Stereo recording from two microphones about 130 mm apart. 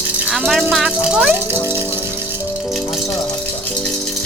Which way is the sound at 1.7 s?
15° right (ahead or behind).